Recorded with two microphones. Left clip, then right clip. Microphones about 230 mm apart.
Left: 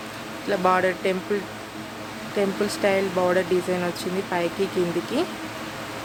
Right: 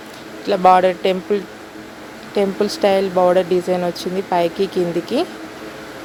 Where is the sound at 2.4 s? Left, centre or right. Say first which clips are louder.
Right 6 dB; centre.